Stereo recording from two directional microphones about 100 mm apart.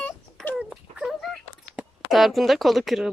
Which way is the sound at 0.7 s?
Centre (ahead or behind).